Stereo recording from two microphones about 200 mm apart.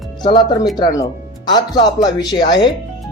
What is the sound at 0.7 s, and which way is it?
A man's voice, 20° left (ahead or behind).